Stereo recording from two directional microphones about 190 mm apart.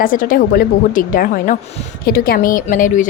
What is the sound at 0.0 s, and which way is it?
A woman's voice, 45° left (ahead or behind).